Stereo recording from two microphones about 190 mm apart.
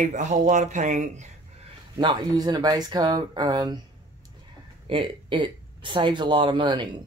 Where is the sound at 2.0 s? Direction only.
20° right (ahead or behind).